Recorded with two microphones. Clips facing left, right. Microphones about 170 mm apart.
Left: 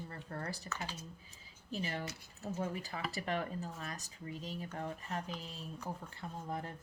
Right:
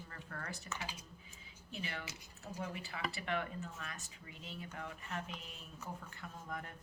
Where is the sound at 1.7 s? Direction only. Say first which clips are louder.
Left 6 dB; 35° left (ahead or behind).